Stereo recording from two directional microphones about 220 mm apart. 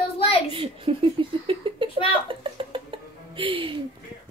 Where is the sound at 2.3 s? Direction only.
25° right (ahead or behind).